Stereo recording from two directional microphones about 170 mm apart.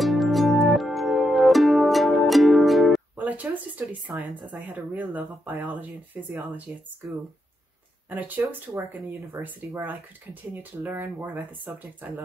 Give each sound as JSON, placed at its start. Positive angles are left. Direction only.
{"t": 0.0, "sound": "music", "side_deg": 0}
{"t": 4.6, "sound": "speech", "side_deg": -10}
{"t": 8.1, "sound": "speech", "side_deg": -10}